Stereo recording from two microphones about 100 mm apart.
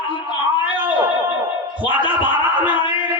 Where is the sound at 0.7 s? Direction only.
20° right (ahead or behind).